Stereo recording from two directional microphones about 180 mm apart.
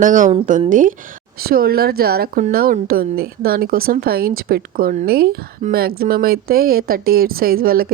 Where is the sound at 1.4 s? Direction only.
55° right (ahead or behind).